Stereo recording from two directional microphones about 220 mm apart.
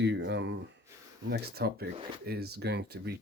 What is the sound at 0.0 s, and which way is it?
Speech, 50° right (ahead or behind).